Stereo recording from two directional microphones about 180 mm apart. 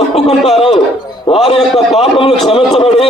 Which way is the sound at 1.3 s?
20° left (ahead or behind).